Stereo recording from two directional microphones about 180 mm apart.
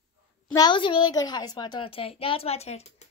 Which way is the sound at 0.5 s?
25° left (ahead or behind).